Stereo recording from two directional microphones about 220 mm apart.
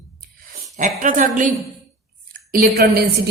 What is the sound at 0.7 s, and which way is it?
Speech, 35° right (ahead or behind).